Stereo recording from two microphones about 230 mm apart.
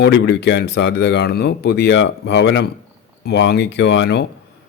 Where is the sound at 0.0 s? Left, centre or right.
Left.